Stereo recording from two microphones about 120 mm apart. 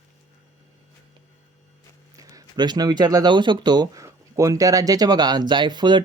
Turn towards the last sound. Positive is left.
turn(degrees=-40)  # may be behind; listen again after turning